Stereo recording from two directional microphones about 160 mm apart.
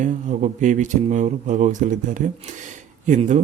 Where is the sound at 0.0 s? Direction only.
50° right (ahead or behind).